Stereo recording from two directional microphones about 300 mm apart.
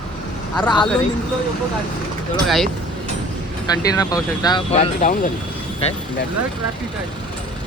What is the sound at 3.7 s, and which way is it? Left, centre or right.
Speech, centre.